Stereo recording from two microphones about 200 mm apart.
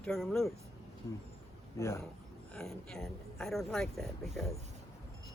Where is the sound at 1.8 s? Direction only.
15° left (ahead or behind).